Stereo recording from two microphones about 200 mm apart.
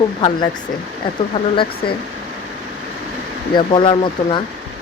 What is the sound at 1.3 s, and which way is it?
Speech, 25° left (ahead or behind).